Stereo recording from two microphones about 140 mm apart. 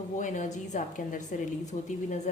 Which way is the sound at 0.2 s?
65° left (ahead or behind).